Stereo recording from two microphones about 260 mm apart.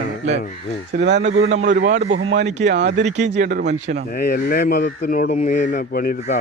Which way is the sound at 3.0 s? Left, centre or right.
Right.